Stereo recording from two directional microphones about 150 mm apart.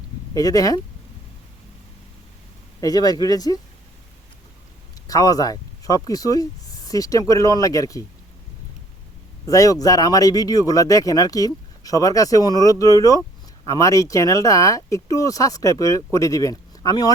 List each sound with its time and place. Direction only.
0.3 s speech: 25° left (ahead or behind)
2.8 s speech: 25° left (ahead or behind)
5.0 s speech: 25° left (ahead or behind)
9.5 s speech: 20° left (ahead or behind)